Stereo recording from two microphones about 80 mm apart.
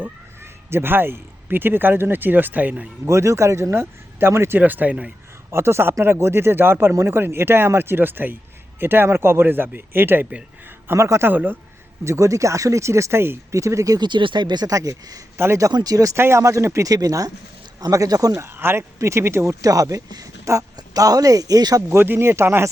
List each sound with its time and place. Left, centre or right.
0.7 s speech: right
3.1 s speech: right; by 5.1 s centre
5.5 s speech: right
10.8 s speech: right
11.3 s speech: right
12.0 s speech: right
14.0 s speech: right
15.4 s speech: right
15.7 s speech: right
16.1 s speech: right
18.3 s speech: right
21.8 s speech: right